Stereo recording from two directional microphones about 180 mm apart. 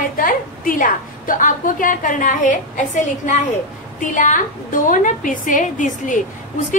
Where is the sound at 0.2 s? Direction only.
50° left (ahead or behind).